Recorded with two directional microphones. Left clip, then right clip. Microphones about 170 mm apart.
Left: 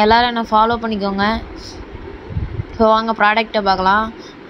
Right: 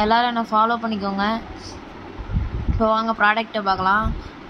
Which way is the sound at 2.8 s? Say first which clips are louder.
Left 5 dB; 20° left (ahead or behind).